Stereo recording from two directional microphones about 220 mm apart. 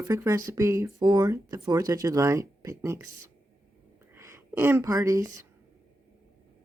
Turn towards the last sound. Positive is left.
turn(degrees=-15)  # may be behind; listen again after turning